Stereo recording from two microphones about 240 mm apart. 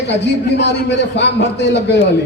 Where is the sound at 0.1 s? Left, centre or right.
Left.